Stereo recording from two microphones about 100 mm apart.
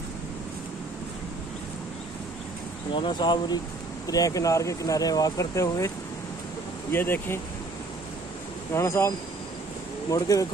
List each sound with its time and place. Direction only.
2.9 s speech: 50° left (ahead or behind)
4.1 s speech: 35° left (ahead or behind)
6.9 s speech: 20° left (ahead or behind)
8.7 s speech: 25° left (ahead or behind)
10.1 s speech: 35° left (ahead or behind)